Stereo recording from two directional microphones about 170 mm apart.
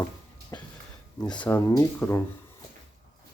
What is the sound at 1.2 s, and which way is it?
Speech, 25° left (ahead or behind).